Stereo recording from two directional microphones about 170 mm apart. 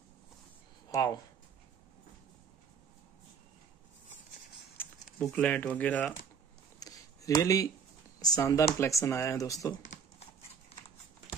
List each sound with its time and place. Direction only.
0.9 s speech: 20° left (ahead or behind)
5.2 s speech: 10° left (ahead or behind)
6.8 s a sound: 20° left (ahead or behind)
8.2 s speech: 20° left (ahead or behind)